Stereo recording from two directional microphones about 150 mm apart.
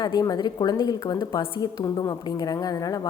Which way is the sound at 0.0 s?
25° left (ahead or behind).